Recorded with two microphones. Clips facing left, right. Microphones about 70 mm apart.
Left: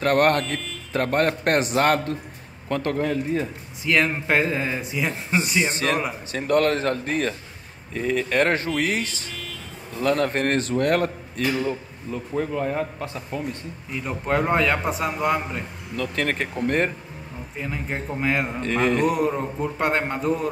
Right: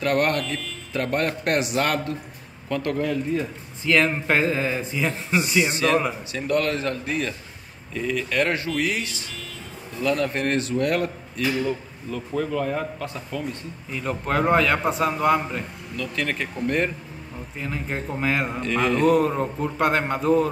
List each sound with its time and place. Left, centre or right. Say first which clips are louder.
0.0 s a man's voice: left 3 dB; left
4.1 s a sound: even; centre
5.6 s a man's voice: right 5 dB; left
12.1 s speech: even; left
13.9 s a man's voice: even; centre
16.0 s a man's voice: left 2 dB; left
17.6 s a man's voice: even; centre
18.6 s a man's voice: left 2 dB; left
18.9 s a sound: right 2 dB; centre